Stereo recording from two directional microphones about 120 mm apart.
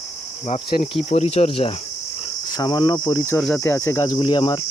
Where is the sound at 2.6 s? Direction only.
40° left (ahead or behind).